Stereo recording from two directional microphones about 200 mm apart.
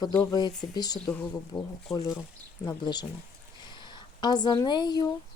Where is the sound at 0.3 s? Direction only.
20° left (ahead or behind).